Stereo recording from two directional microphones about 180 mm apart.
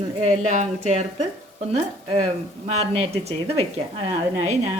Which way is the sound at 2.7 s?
35° right (ahead or behind).